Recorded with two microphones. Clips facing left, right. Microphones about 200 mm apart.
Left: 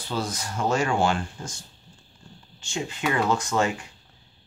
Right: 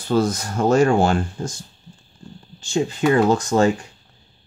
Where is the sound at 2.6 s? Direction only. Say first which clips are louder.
Right 10 dB; 35° right (ahead or behind).